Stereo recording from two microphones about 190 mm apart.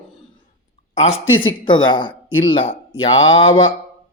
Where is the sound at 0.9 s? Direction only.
35° left (ahead or behind).